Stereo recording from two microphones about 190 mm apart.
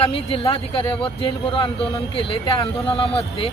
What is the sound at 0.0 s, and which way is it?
Speech, 30° left (ahead or behind).